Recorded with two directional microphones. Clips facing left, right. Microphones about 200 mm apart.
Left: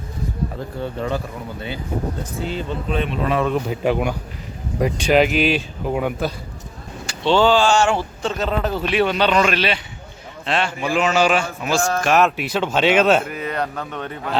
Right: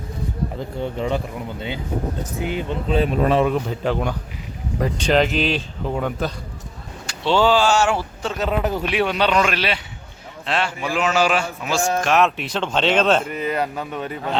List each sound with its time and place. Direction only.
0.8 s speech: 20° right (ahead or behind)
2.4 s speech: 15° right (ahead or behind)
2.9 s speech: 30° right (ahead or behind)
3.5 s speech: 10° left (ahead or behind)
7.1 s speech: 5° right (ahead or behind)